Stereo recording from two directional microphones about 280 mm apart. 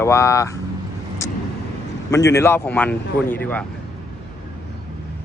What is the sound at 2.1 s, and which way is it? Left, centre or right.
Speech, centre.